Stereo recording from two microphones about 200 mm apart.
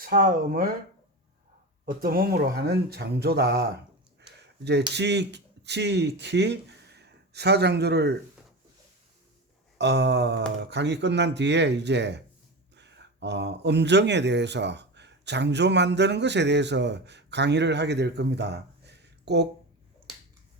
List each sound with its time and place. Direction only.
0.0 s speech: 45° right (ahead or behind)
1.8 s speech: 45° right (ahead or behind)
4.9 s speech: 60° right (ahead or behind)
9.7 s speech: 60° right (ahead or behind)